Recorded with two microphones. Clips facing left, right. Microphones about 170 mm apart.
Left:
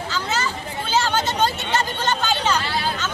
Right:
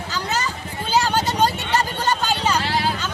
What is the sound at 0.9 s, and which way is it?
Vehicle, 10° right (ahead or behind).